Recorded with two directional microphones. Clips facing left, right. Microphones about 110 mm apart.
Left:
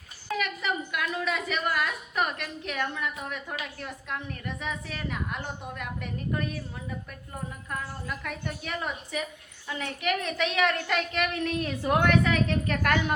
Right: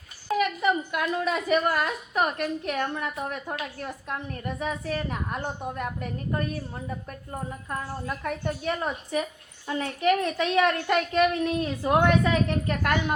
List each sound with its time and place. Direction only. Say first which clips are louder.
0.3 s a woman's voice: right 6 dB; 30° right (ahead or behind)